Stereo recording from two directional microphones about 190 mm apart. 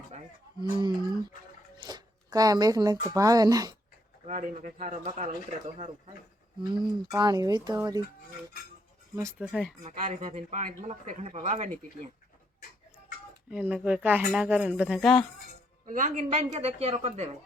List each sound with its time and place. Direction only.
0.8 s speech: 25° right (ahead or behind)
4.3 s speech: 40° right (ahead or behind)
6.6 s speech: 20° right (ahead or behind)
9.4 s speech: 5° right (ahead or behind)
9.8 s speech: 40° right (ahead or behind)
13.5 s speech: 5° right (ahead or behind)
15.9 s speech: 45° right (ahead or behind)